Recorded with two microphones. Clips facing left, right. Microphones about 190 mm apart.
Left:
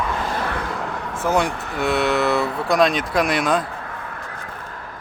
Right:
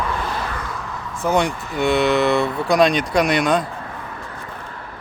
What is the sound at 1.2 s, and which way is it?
Speech, centre (ahead or behind).